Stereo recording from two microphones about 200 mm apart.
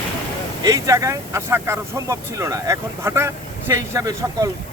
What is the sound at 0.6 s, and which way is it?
Speech, 15° right (ahead or behind).